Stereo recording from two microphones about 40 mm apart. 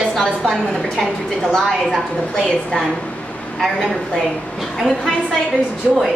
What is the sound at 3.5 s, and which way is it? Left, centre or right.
Speech, centre.